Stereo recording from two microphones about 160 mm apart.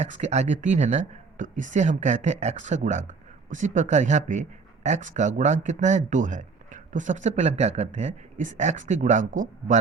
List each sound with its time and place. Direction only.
0.0 s speech: 45° right (ahead or behind)